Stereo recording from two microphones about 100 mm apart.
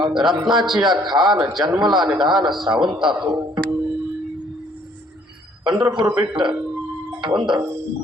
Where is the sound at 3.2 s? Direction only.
45° right (ahead or behind).